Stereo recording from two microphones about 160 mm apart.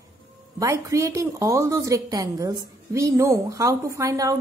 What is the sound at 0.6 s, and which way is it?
A woman's voice, 20° right (ahead or behind).